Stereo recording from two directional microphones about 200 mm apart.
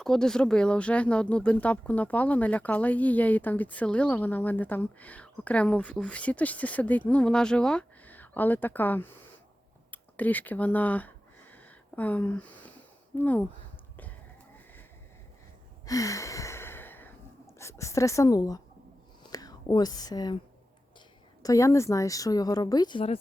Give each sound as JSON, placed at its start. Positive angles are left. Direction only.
{"t": 0.0, "sound": "speech", "side_deg": 5}
{"t": 11.5, "sound": "a sound", "side_deg": 5}
{"t": 13.1, "sound": "speech", "side_deg": 10}
{"t": 15.9, "sound": "gasp", "side_deg": 15}
{"t": 17.6, "sound": "a woman's voice", "side_deg": 15}
{"t": 21.4, "sound": "speech", "side_deg": 15}